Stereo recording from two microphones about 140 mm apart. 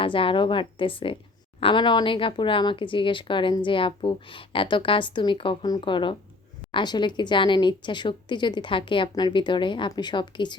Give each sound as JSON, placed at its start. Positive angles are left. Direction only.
{"t": 0.0, "sound": "speech", "side_deg": 40}